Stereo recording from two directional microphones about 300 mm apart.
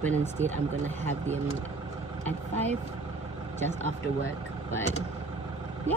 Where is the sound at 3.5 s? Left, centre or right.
Right.